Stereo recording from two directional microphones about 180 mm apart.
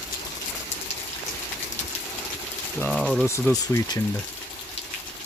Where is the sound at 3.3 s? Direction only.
15° left (ahead or behind).